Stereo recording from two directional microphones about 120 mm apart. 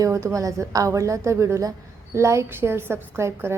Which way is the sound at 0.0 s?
25° right (ahead or behind).